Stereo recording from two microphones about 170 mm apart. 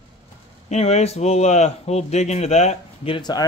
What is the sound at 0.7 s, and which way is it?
Speech, 40° left (ahead or behind).